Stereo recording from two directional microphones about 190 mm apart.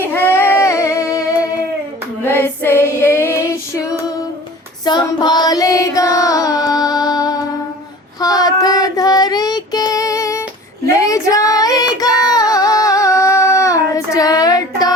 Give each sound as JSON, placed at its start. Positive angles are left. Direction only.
{"t": 0.0, "sound": "a sound", "side_deg": 10}
{"t": 2.2, "sound": "female singing", "side_deg": 10}
{"t": 4.9, "sound": "music", "side_deg": 20}
{"t": 8.2, "sound": "child singing", "side_deg": 20}
{"t": 12.2, "sound": "a sound", "side_deg": 20}
{"t": 13.9, "sound": "child singing", "side_deg": 15}